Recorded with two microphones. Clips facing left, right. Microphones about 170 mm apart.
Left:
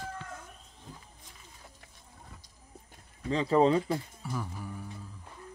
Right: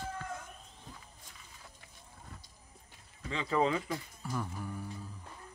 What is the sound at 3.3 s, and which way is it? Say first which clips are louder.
Speech: left 7 dB; 35° left (ahead or behind).